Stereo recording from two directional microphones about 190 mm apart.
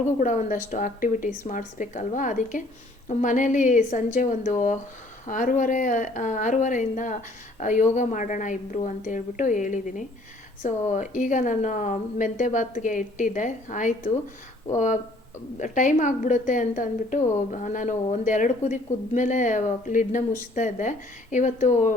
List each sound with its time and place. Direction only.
0.2 s a woman's voice: 40° left (ahead or behind)
15.5 s a woman's voice: 40° left (ahead or behind)